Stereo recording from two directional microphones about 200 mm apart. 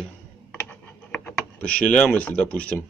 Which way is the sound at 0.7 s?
10° left (ahead or behind).